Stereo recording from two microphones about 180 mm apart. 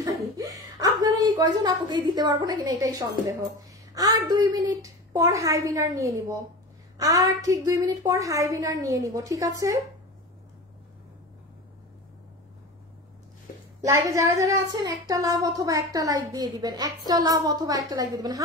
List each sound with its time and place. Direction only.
0.0 s a woman's voice: 20° right (ahead or behind)
13.7 s a woman's voice: 15° right (ahead or behind)